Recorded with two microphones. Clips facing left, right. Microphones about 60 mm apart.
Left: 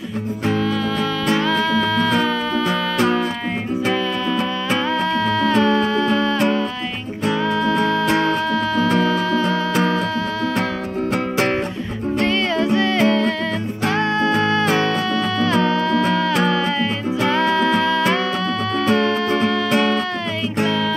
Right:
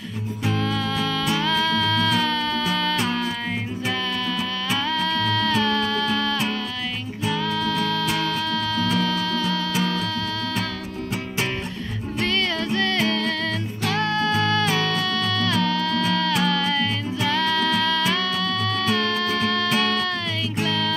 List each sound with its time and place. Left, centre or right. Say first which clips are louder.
0.5 s music: left 4 dB; centre
5.4 s music: left 8 dB; left
7.6 s music: left 6 dB; left
9.0 s music: left 6 dB; left
12.3 s music: left 4 dB; centre
18.9 s music: left 7 dB; left